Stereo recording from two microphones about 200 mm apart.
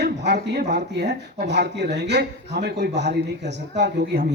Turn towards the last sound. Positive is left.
turn(degrees=-60)  # may be behind; listen again after turning